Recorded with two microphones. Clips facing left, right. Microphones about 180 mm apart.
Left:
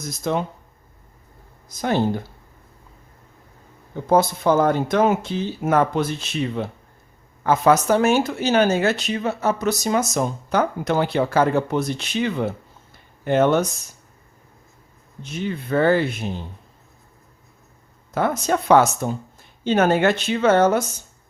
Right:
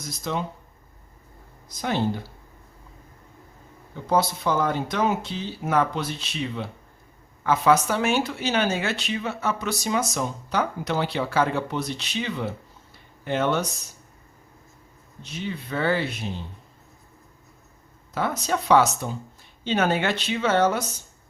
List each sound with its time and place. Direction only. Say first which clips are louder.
0.3 s speech: left 6 dB; 50° left (ahead or behind)
1.8 s speech: left 4 dB; 45° left (ahead or behind)
4.0 s speech: left 5 dB; 50° left (ahead or behind)
15.2 s speech: left 5 dB; 50° left (ahead or behind)
18.1 s speech: left 5 dB; 50° left (ahead or behind)